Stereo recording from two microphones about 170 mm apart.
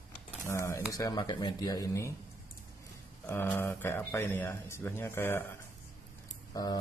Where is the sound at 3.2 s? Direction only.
15° left (ahead or behind).